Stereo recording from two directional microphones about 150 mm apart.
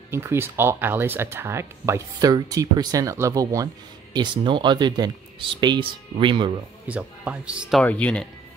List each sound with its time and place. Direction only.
0.1 s speech: 15° right (ahead or behind); by 6.5 s 35° right (ahead or behind)
6.9 s speech: 10° right (ahead or behind)
7.8 s speech: 10° left (ahead or behind)